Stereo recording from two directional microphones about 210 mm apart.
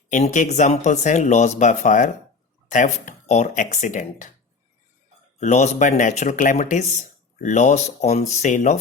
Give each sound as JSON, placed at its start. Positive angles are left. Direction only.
{"t": 0.1, "sound": "speech", "side_deg": 35}
{"t": 5.4, "sound": "speech", "side_deg": 35}